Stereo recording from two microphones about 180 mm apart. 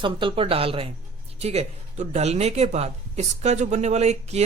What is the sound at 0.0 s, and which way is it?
A woman's voice, 25° right (ahead or behind).